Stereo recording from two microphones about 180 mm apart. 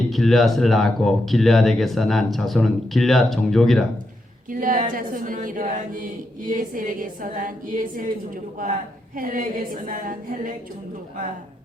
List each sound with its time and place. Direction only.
0.1 s speech: centre (ahead or behind)
4.4 s a woman's voice: 50° right (ahead or behind)
9.1 s a woman's voice: 50° right (ahead or behind)